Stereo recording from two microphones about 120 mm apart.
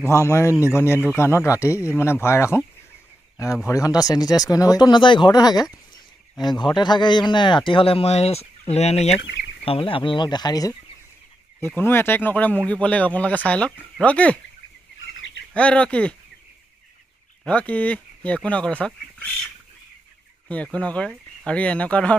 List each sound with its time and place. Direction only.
0.0 s speech: 20° left (ahead or behind)
3.6 s speech: 30° left (ahead or behind); by 9.2 s 65° left (ahead or behind)
9.7 s speech: 50° left (ahead or behind); by 10.7 s 35° left (ahead or behind)
11.6 s speech: 15° left (ahead or behind)
15.5 s speech: 10° left (ahead or behind)
17.5 s speech: 10° left (ahead or behind)
20.4 s speech: 10° left (ahead or behind)